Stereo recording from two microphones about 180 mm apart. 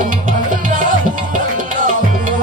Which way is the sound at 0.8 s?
45° right (ahead or behind).